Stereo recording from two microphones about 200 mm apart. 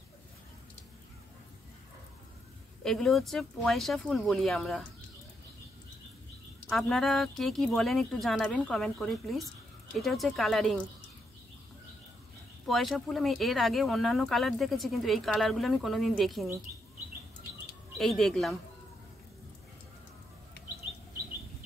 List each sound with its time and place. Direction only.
2.8 s speech: centre (ahead or behind)
6.7 s speech: centre (ahead or behind)
12.6 s speech: centre (ahead or behind)
17.9 s speech: centre (ahead or behind)